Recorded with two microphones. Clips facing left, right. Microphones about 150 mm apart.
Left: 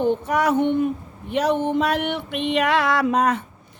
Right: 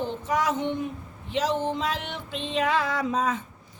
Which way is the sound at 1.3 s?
60° left (ahead or behind).